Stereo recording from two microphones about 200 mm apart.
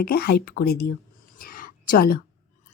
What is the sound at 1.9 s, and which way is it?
Speech, 45° left (ahead or behind).